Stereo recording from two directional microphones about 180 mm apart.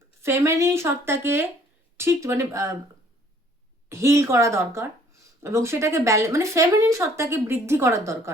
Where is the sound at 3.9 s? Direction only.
15° right (ahead or behind).